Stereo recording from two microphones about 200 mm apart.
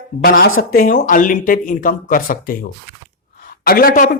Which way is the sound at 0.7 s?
40° left (ahead or behind).